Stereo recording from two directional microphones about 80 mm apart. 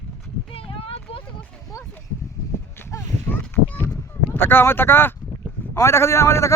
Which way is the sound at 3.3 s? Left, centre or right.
Left.